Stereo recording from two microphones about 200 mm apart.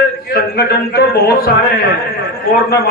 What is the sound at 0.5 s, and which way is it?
Speech, 50° left (ahead or behind).